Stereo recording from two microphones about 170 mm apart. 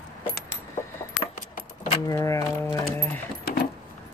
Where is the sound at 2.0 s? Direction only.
20° left (ahead or behind).